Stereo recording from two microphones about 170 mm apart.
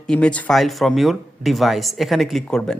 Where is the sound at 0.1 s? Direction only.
5° left (ahead or behind).